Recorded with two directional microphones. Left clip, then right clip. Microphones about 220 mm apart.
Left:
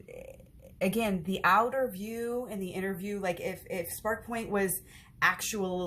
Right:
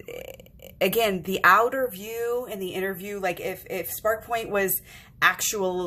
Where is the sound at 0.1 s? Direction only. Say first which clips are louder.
Right 8 dB; 45° right (ahead or behind).